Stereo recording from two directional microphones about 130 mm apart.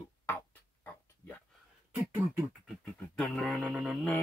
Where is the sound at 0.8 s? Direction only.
15° left (ahead or behind).